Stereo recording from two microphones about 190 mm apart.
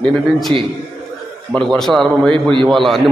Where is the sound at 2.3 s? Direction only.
25° right (ahead or behind).